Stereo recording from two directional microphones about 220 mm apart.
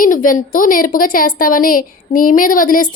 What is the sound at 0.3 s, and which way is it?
A woman's voice, 40° left (ahead or behind).